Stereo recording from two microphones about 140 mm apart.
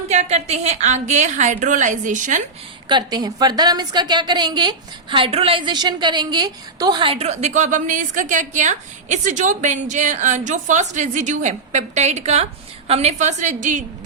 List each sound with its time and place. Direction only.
0.1 s a woman's voice: 50° right (ahead or behind)
2.9 s a woman's voice: 30° right (ahead or behind); by 13.8 s 60° right (ahead or behind)